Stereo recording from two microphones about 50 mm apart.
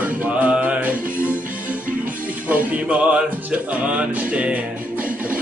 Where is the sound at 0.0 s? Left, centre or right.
Right.